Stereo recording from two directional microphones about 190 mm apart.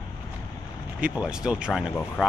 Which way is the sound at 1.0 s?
5° right (ahead or behind).